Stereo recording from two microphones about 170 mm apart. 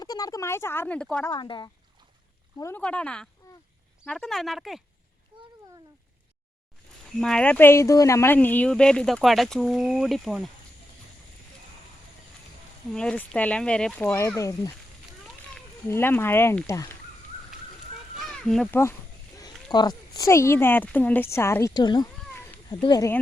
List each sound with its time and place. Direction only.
0.0 s a woman's voice: 20° left (ahead or behind); by 1.3 s 5° left (ahead or behind)
1.3 s speech: 25° left (ahead or behind)
2.6 s a woman's voice: 15° left (ahead or behind)
2.8 s a woman's voice: 5° left (ahead or behind)
7.2 s speech: 5° left (ahead or behind)
12.9 s a woman's voice: 5° left (ahead or behind)
15.9 s a woman's voice: 15° left (ahead or behind)
18.2 s speech: centre (ahead or behind)
19.7 s a woman's voice: 25° left (ahead or behind)
22.3 s cat: 10° left (ahead or behind)
22.7 s speech: 25° left (ahead or behind)